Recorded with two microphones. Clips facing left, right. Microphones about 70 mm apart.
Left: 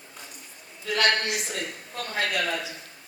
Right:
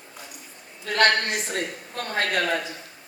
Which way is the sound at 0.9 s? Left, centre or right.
Right.